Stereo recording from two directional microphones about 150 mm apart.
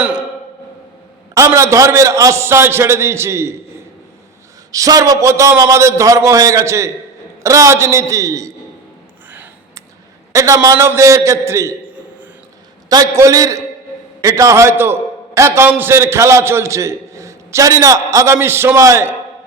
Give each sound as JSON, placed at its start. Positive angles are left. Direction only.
{"t": 0.0, "sound": "a sound", "side_deg": -5}
{"t": 1.3, "sound": "a man's voice", "side_deg": -20}
{"t": 4.7, "sound": "a man's voice", "side_deg": -25}
{"t": 9.3, "sound": "a sound", "side_deg": -10}
{"t": 10.3, "sound": "a man's voice", "side_deg": -20}
{"t": 12.9, "sound": "a man's voice", "side_deg": -20}